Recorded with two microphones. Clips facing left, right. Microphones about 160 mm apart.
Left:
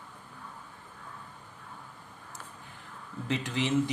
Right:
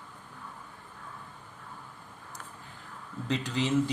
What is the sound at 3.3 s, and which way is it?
Speech, 20° left (ahead or behind).